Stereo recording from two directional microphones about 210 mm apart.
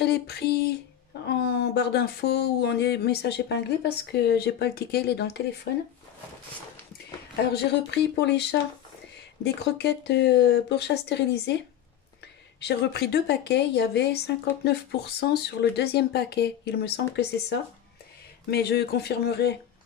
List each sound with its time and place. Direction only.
0.0 s speech: 50° left (ahead or behind)
7.5 s speech: 55° left (ahead or behind)
12.5 s speech: 50° left (ahead or behind)